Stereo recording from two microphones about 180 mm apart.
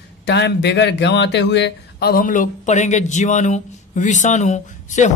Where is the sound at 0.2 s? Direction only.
70° left (ahead or behind).